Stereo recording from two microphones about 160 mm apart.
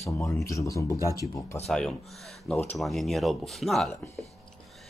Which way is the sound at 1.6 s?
5° left (ahead or behind).